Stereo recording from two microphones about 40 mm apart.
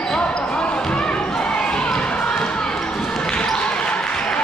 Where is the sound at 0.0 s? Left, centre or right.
Left.